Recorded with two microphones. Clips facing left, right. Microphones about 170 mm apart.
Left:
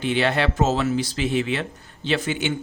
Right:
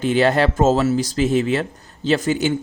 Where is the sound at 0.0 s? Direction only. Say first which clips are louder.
Right 5 dB; 40° right (ahead or behind).